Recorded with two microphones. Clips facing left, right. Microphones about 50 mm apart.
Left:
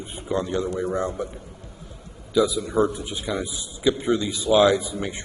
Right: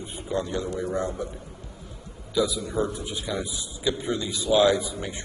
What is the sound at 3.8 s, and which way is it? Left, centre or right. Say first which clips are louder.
A man's voice: left 6 dB; left.